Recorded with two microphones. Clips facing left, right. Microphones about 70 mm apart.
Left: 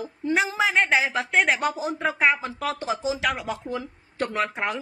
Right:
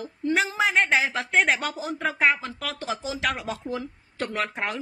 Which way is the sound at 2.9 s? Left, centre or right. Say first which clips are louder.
Left 3 dB; centre.